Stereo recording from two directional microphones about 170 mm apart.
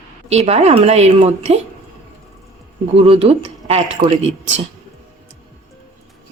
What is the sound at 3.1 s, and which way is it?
Speech, 35° right (ahead or behind).